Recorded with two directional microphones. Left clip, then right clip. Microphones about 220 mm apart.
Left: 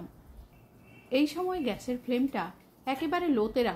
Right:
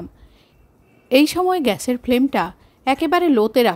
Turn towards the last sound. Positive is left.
turn(degrees=-45)  # may be behind; listen again after turning